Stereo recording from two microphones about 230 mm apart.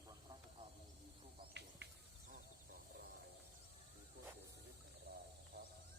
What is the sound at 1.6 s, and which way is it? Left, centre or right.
Insect, right.